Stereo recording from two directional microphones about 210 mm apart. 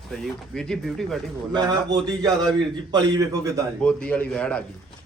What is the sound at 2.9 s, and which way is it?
Speech, 20° right (ahead or behind).